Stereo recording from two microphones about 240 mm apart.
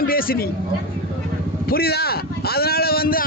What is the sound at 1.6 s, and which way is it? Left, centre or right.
A man's voice, left.